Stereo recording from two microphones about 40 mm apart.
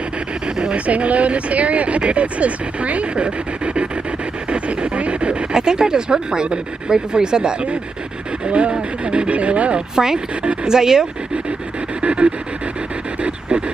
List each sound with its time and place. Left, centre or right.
0.6 s speech: right
4.5 s a sound: right
5.5 s speech: centre
9.9 s speech: centre
10.4 s speech: right
10.7 s speech: centre
12.0 s a sound: right